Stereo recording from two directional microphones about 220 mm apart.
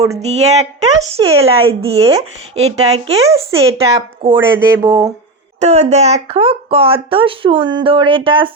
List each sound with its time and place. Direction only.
0.3 s speech: 30° right (ahead or behind); by 5.1 s 15° right (ahead or behind)
5.5 s speech: 30° right (ahead or behind)